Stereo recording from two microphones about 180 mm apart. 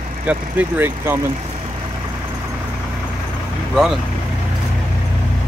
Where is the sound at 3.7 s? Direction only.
5° right (ahead or behind).